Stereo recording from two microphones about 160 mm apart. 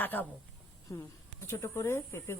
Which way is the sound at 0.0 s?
10° left (ahead or behind).